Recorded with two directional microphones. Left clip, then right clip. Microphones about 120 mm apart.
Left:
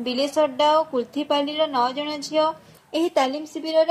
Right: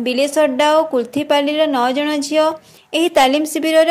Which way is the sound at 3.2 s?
70° right (ahead or behind).